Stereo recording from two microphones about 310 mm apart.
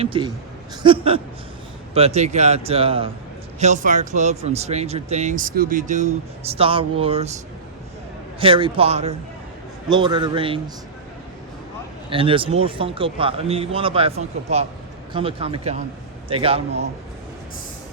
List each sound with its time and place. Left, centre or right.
0.0 s speech: centre
8.4 s speech: centre
12.1 s speech: centre